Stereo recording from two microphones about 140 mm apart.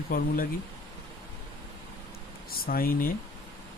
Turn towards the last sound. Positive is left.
turn(degrees=90)